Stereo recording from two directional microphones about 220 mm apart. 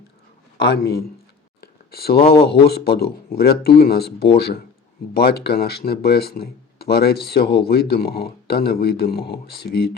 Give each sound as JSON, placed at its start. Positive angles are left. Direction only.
{"t": 0.6, "sound": "speech", "side_deg": 50}
{"t": 1.6, "sound": "a sound", "side_deg": 45}
{"t": 2.2, "sound": "speech", "side_deg": 25}
{"t": 2.5, "sound": "speech", "side_deg": 45}